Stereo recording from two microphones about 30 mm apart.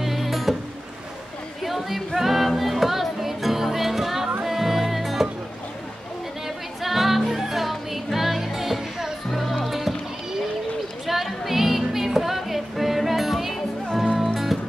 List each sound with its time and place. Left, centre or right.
0.0 s music: centre
1.6 s music: centre
6.4 s music: centre
11.1 s music: centre